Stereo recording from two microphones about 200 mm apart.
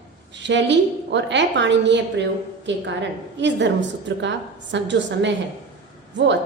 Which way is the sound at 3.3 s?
60° right (ahead or behind).